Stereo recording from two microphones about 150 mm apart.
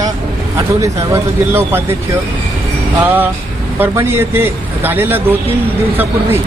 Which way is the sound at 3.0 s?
10° right (ahead or behind).